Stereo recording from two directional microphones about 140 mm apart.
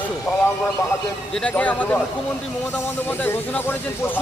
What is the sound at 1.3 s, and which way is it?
A man's voice, 5° left (ahead or behind).